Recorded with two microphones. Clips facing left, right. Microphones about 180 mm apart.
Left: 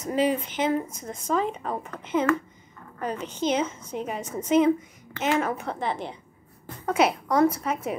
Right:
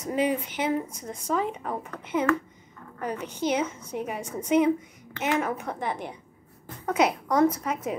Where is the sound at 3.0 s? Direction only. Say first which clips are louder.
Left 1 dB; 25° left (ahead or behind).